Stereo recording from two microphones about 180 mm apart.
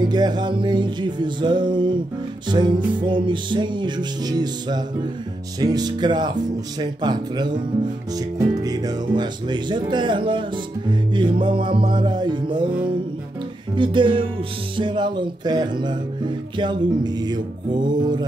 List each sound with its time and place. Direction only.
0.0 s music: 25° right (ahead or behind)
13.7 s music: 25° right (ahead or behind)